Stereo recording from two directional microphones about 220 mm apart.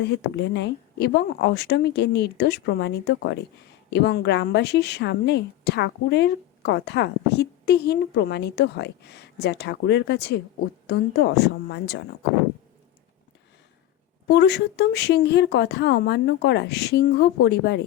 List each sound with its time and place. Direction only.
0.0 s a woman's voice: 50° left (ahead or behind)
14.3 s a woman's voice: 50° left (ahead or behind)